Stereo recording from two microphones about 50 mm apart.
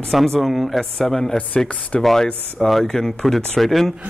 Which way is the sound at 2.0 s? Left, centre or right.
Centre.